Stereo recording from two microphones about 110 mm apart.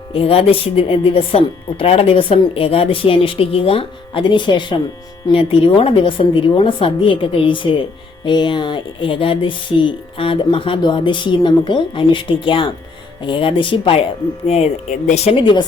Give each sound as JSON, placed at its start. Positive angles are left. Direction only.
{"t": 0.1, "sound": "speech", "side_deg": 60}
{"t": 14.4, "sound": "speech", "side_deg": 70}